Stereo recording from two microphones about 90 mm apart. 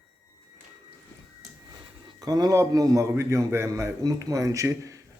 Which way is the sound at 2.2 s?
45° right (ahead or behind).